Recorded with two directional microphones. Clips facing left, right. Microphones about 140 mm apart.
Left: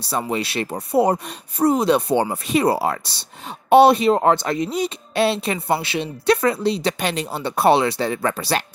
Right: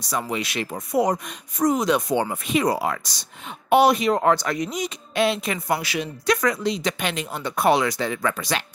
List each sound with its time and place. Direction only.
0.0 s speech: 30° left (ahead or behind)